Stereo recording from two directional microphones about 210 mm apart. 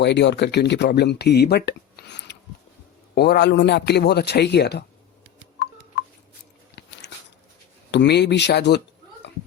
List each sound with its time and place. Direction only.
0.0 s a man's voice: 55° left (ahead or behind)
6.7 s biting: 55° left (ahead or behind)
7.9 s a man's voice: 55° left (ahead or behind)
9.2 s a sound: 55° left (ahead or behind)